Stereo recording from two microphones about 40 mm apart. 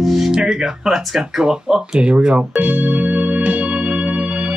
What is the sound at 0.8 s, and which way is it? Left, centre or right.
Speech, centre.